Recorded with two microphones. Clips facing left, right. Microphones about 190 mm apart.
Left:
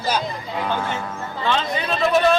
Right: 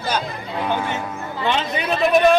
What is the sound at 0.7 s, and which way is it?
Speech, 15° right (ahead or behind).